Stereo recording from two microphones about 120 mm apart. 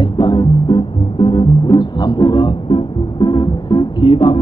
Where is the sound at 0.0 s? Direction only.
40° left (ahead or behind).